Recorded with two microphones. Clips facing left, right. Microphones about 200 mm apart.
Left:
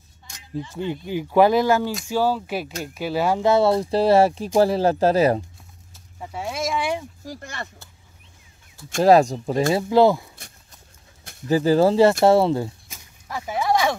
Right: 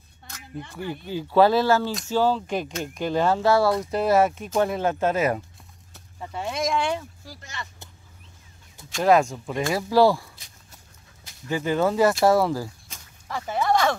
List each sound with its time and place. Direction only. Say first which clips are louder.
0.7 s speech: left 3 dB; 20° left (ahead or behind)
6.1 s a sound: even; 5° left (ahead or behind)
7.2 s speech: left 6 dB; 50° left (ahead or behind)
8.9 s speech: left 4 dB; 35° left (ahead or behind)
9.7 s speech: left 2 dB; 25° left (ahead or behind)
11.4 s speech: left 6 dB; 35° left (ahead or behind)
12.8 s a sound: even; 10° left (ahead or behind)